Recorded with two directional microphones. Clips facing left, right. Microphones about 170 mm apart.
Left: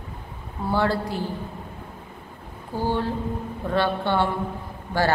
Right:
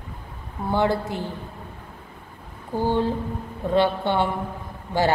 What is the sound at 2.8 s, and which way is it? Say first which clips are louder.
A woman's voice: right 3 dB; 15° right (ahead or behind).